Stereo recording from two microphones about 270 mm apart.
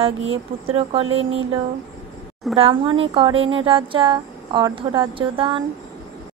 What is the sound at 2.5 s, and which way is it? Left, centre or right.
Speech, centre.